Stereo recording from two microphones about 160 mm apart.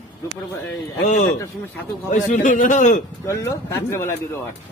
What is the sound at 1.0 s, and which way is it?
A man's voice, 50° left (ahead or behind).